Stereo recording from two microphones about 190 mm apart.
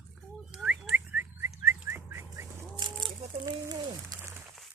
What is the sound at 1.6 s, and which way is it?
Bird, 15° right (ahead or behind).